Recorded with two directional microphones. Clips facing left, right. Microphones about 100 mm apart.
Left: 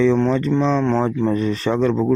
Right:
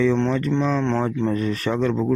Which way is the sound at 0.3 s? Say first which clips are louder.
Left 3 dB; 20° left (ahead or behind).